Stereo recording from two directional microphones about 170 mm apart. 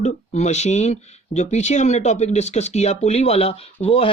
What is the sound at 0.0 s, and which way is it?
Speech, 40° left (ahead or behind).